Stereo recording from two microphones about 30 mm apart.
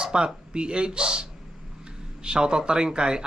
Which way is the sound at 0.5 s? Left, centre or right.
Right.